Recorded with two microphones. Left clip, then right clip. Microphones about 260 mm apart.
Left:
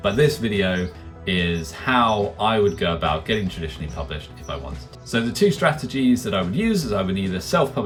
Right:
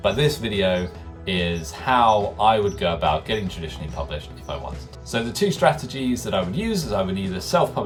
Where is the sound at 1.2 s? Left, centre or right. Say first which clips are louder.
Left 1 dB; centre.